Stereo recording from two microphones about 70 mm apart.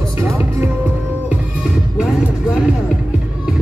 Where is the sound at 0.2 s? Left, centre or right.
Right.